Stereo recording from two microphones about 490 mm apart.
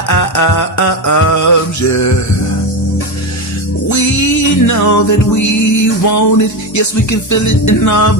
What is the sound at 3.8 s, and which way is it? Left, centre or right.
Music, left.